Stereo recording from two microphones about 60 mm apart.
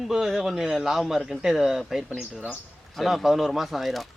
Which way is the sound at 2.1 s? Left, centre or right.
Centre.